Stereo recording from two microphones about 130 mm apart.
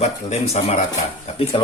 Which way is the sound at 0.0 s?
55° left (ahead or behind).